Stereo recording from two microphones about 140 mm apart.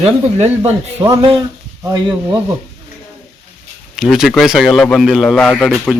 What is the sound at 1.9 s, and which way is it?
Speech, 30° right (ahead or behind).